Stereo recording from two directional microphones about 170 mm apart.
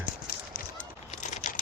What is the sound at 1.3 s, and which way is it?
Computer keyboard, 50° left (ahead or behind).